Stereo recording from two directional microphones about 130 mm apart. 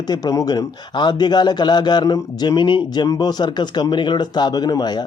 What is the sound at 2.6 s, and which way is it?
Speech, 35° left (ahead or behind).